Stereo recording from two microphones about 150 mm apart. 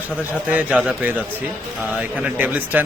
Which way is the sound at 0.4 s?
10° right (ahead or behind).